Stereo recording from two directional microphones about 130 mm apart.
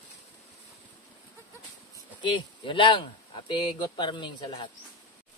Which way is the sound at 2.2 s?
40° left (ahead or behind).